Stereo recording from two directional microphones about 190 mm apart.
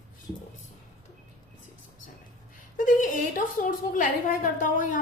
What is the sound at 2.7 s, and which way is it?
A woman's voice, 45° left (ahead or behind).